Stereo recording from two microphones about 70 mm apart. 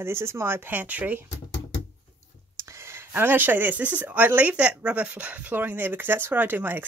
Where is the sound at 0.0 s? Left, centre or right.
Right.